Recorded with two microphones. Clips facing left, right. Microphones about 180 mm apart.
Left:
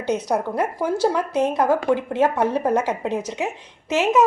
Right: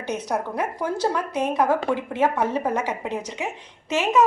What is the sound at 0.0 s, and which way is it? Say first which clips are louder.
A woman's voice: left 4 dB; 10° left (ahead or behind).